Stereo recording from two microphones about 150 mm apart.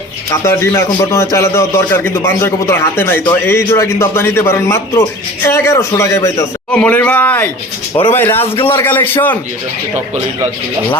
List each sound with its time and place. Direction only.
0.4 s a man's voice: 15° left (ahead or behind)
6.7 s speech: 10° left (ahead or behind)